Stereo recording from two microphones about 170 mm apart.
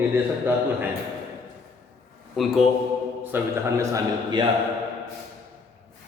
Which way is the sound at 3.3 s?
20° right (ahead or behind).